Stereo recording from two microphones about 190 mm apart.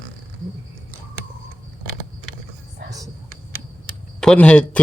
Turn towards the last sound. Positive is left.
turn(degrees=5)  # may be behind; listen again after turning